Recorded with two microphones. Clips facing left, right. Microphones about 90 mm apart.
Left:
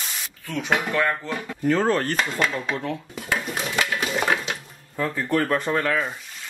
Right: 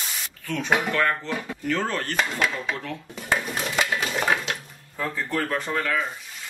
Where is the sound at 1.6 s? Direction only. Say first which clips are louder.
Left 7 dB; 40° left (ahead or behind).